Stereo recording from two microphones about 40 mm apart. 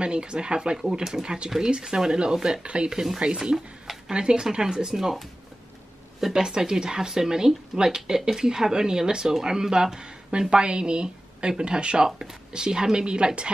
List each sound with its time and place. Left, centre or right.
0.0 s speech: right
2.6 s speech: right
3.3 s speech: centre
4.1 s speech: right
6.2 s speech: centre